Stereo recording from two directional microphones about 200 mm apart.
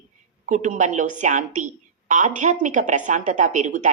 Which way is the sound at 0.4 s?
40° right (ahead or behind).